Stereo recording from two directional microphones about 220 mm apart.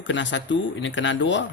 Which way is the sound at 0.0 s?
55° left (ahead or behind).